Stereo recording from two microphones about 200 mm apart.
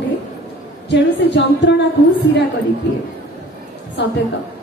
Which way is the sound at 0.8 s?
60° left (ahead or behind).